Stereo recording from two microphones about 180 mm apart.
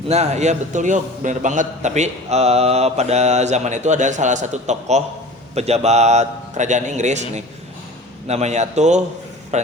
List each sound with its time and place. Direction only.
0.1 s a man's voice: 40° right (ahead or behind)